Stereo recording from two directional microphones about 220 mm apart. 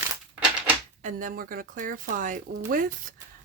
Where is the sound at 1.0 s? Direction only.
35° right (ahead or behind).